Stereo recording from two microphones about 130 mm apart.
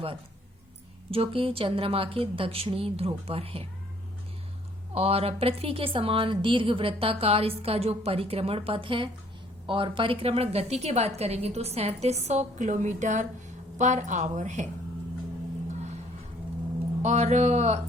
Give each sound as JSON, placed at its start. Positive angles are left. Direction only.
{"t": 1.1, "sound": "a woman's voice", "side_deg": -45}
{"t": 4.9, "sound": "a woman's voice", "side_deg": -50}
{"t": 17.0, "sound": "speech", "side_deg": -60}